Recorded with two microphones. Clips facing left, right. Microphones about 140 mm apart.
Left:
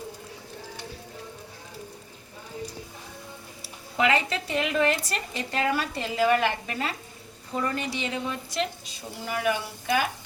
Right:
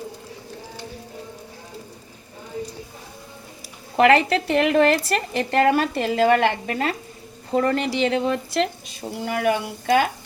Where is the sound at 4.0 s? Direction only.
70° right (ahead or behind).